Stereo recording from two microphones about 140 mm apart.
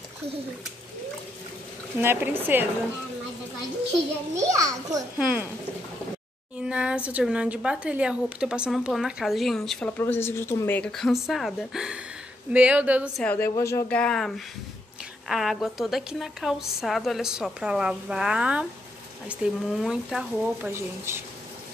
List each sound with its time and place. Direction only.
2.0 s speech: 15° right (ahead or behind)
4.4 s a child's voice: 25° right (ahead or behind)
5.2 s speech: 5° right (ahead or behind)
6.6 s speech: 5° right (ahead or behind); by 10.8 s 20° left (ahead or behind)
10.8 s speech: 5° left (ahead or behind)
13.2 s a woman's voice: 10° left (ahead or behind); by 20.7 s 5° right (ahead or behind)
20.7 s speech: 20° right (ahead or behind)